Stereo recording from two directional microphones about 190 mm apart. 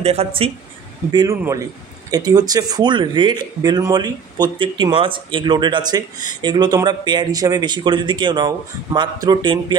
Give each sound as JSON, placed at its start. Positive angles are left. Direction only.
{"t": 0.0, "sound": "a man's voice", "side_deg": -30}
{"t": 1.1, "sound": "a man's voice", "side_deg": -15}